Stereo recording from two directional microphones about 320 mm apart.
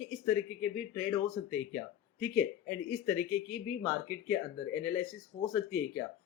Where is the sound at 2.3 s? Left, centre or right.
Left.